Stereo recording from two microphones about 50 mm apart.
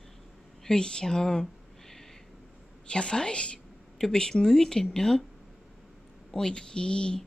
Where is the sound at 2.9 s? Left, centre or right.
Centre.